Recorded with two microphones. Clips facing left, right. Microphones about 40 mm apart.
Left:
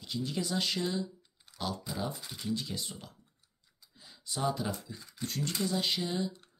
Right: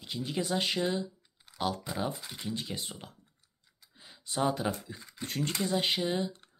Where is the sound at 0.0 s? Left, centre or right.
Right.